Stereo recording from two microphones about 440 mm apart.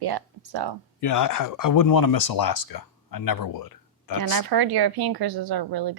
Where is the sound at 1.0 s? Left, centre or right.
Left.